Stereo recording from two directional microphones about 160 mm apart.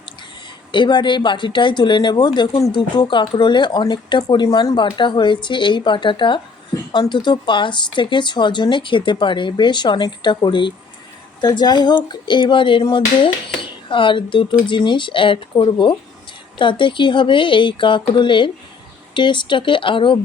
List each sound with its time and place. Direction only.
0.7 s speech: 30° left (ahead or behind)